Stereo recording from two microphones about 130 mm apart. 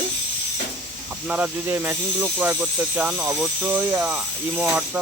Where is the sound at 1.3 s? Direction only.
10° right (ahead or behind).